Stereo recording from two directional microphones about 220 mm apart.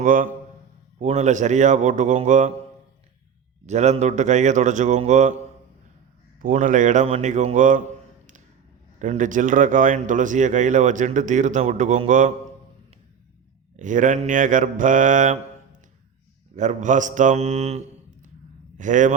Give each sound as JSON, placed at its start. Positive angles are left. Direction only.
{"t": 0.0, "sound": "a man's voice", "side_deg": -40}
{"t": 3.7, "sound": "a man's voice", "side_deg": -30}
{"t": 6.4, "sound": "a man's voice", "side_deg": -35}
{"t": 9.0, "sound": "a man's voice", "side_deg": -35}
{"t": 13.7, "sound": "a man's voice", "side_deg": -35}
{"t": 16.6, "sound": "a man's voice", "side_deg": -35}